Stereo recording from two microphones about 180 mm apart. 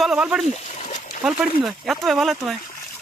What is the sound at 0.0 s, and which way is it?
Speech, 5° right (ahead or behind).